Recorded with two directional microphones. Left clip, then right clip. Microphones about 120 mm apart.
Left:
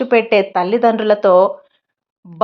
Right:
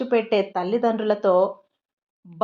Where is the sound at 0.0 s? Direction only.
30° left (ahead or behind).